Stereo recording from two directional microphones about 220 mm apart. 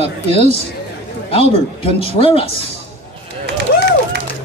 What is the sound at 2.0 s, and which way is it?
Speech, 25° left (ahead or behind).